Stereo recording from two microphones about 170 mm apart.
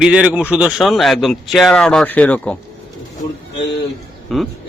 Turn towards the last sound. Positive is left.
turn(degrees=0)  # may be behind; listen again after turning